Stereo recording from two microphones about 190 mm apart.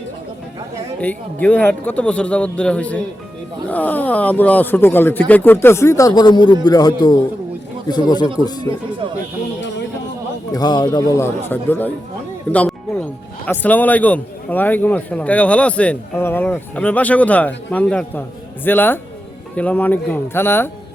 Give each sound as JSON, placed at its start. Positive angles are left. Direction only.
{"t": 1.0, "sound": "a man's voice", "side_deg": 10}
{"t": 10.5, "sound": "a man's voice", "side_deg": 20}